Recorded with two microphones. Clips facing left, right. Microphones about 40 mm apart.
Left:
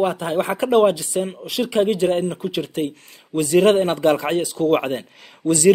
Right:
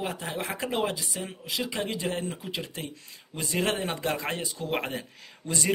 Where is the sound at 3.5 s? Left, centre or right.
Left.